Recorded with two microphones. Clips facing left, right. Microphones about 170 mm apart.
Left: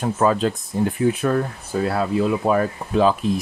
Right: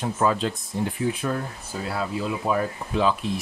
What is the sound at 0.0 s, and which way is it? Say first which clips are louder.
Speech: left 4 dB; 45° left (ahead or behind).